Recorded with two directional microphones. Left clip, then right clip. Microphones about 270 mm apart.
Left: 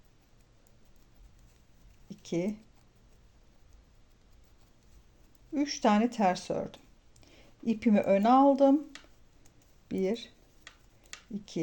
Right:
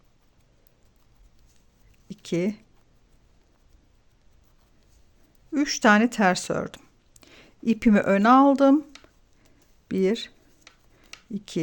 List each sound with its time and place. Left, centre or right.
2.0 s a sound: right
5.5 s speech: right
9.9 s speech: right
11.5 s speech: right